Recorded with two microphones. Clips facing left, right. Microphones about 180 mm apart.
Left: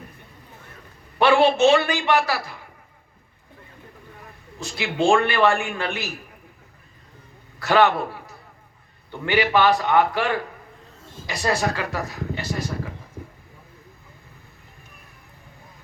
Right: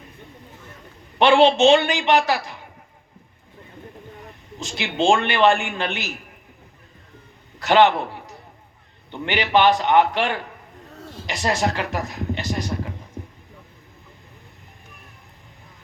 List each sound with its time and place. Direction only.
1.2 s a man's voice: 20° right (ahead or behind)
4.3 s a man's voice: 20° right (ahead or behind)
7.6 s a man's voice: 20° right (ahead or behind)
11.0 s a sound: 65° right (ahead or behind)
11.3 s speech: 20° right (ahead or behind)